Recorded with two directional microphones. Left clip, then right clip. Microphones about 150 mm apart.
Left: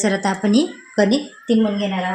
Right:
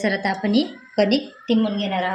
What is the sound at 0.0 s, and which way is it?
Speech, 90° left.